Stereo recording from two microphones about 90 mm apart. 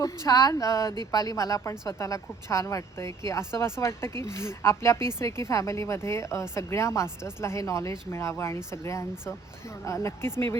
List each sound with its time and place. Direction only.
0.0 s speech: 40° left (ahead or behind)